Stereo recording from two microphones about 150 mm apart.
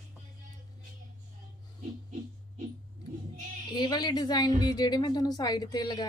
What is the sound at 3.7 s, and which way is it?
A woman's voice, 25° left (ahead or behind).